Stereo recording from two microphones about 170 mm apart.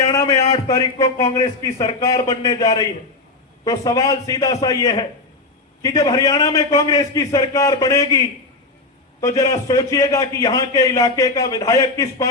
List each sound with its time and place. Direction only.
0.1 s a sound: 20° left (ahead or behind)
0.5 s a man's voice: 20° left (ahead or behind)
9.2 s a man's voice: 20° left (ahead or behind)